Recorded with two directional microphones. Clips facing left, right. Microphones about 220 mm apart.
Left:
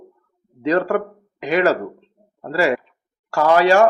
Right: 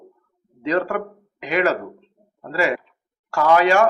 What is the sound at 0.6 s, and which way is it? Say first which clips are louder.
Speech: left 3 dB; 40° left (ahead or behind).